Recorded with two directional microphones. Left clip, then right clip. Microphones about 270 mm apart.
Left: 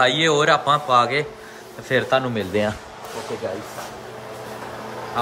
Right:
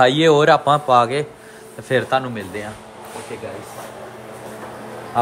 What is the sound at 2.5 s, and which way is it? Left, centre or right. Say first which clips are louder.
Speech: left 11 dB; left.